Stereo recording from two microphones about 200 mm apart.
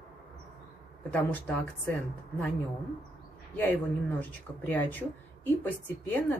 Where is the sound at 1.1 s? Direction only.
10° left (ahead or behind).